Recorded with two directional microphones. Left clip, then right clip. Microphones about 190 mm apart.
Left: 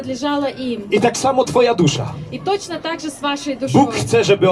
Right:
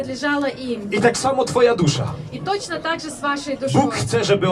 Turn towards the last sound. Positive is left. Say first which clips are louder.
# left 4 dB
turn(degrees=15)  # may be behind; listen again after turning